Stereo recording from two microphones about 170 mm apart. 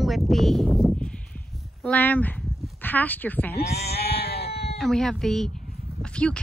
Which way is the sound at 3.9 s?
70° left (ahead or behind).